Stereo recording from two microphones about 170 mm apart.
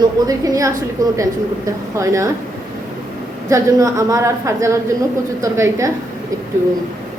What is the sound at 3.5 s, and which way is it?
A woman's voice, 15° right (ahead or behind).